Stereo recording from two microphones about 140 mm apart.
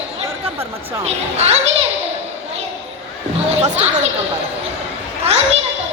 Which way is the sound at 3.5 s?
55° right (ahead or behind).